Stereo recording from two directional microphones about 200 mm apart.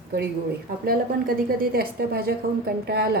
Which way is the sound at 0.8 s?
45° right (ahead or behind).